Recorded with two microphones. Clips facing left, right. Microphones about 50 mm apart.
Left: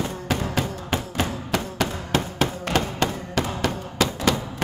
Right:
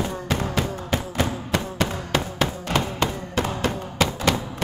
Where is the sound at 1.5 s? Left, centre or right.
Right.